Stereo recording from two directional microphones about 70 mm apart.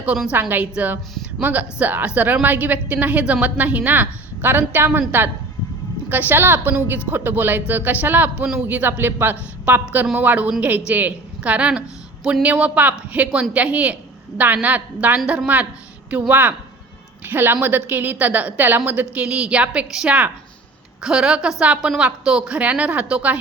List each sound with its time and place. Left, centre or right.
0.3 s a woman's voice: right
21.0 s a woman's voice: centre